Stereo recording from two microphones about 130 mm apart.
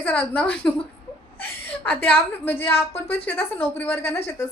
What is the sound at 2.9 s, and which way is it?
Speech, 50° left (ahead or behind).